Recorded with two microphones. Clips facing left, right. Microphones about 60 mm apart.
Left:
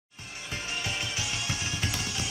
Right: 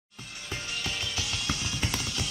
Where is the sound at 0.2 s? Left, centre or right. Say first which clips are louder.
Left 1 dB; left.